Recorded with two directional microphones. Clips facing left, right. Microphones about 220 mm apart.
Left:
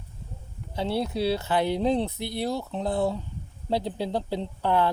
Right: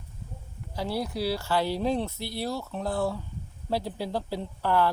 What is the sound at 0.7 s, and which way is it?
Speech, 25° left (ahead or behind).